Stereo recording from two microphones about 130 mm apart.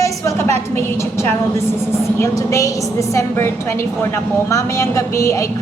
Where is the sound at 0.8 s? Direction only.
20° left (ahead or behind).